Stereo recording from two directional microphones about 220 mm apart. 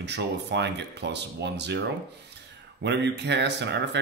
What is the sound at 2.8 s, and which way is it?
Speech, 50° right (ahead or behind).